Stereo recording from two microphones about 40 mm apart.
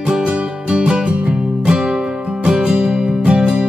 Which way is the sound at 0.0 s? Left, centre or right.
Right.